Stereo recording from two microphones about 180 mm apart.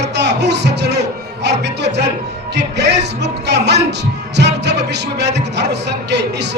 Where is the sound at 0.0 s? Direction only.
70° right (ahead or behind).